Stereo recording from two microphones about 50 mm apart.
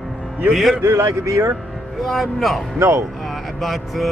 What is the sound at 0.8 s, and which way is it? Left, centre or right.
Speech, right.